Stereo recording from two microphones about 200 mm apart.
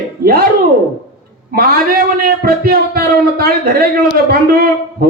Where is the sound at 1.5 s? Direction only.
45° right (ahead or behind).